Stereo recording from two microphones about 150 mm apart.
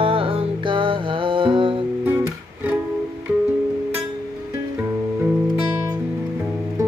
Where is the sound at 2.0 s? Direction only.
15° right (ahead or behind).